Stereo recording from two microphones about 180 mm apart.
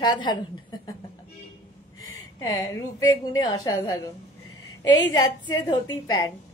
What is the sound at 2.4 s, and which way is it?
A woman's voice, 20° left (ahead or behind).